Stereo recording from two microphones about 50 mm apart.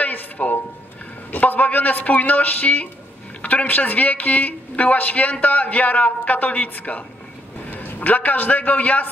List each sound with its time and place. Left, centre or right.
0.0 s music: left
1.3 s a woman's voice: left